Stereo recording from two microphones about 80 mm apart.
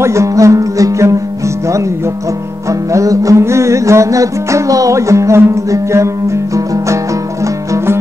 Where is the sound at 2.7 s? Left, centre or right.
Right.